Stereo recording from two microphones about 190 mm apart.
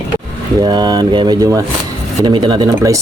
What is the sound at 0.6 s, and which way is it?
Speech, 25° right (ahead or behind).